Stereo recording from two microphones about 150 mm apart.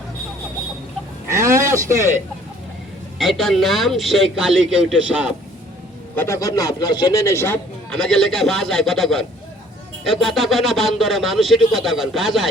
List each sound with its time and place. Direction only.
1.3 s a sound: 20° right (ahead or behind)
3.2 s speech: centre (ahead or behind)
6.1 s a man's voice: 20° left (ahead or behind)
7.9 s speech: 5° left (ahead or behind)